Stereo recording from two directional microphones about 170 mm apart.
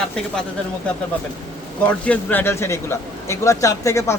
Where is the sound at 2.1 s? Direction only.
10° left (ahead or behind).